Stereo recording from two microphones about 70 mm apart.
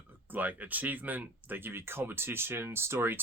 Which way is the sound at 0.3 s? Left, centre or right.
Right.